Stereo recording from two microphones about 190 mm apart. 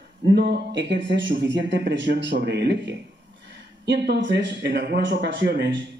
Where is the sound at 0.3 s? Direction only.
60° right (ahead or behind).